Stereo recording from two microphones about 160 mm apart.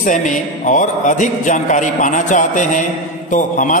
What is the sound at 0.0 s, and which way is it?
A man's voice, 55° left (ahead or behind).